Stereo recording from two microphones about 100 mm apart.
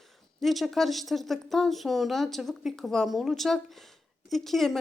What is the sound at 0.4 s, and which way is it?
Speech, centre (ahead or behind).